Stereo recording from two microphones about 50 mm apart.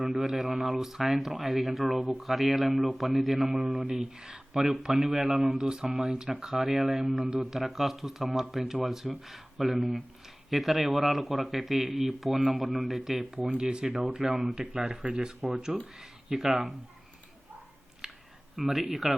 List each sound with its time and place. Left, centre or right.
0.0 s speech: centre
13.3 s speech: right
13.8 s speech: centre
14.1 s speech: centre
16.0 s speech: centre
18.0 s a sound: centre
18.5 s speech: centre